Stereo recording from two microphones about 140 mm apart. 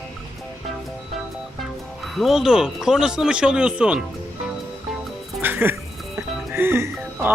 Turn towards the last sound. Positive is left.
turn(degrees=-15)  # may be behind; listen again after turning